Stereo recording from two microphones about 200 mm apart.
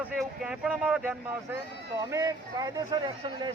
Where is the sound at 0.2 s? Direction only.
5° right (ahead or behind).